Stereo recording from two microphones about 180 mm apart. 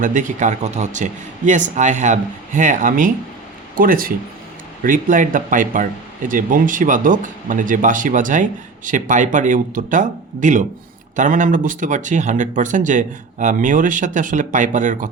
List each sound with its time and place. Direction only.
0.0 s speech: 45° right (ahead or behind)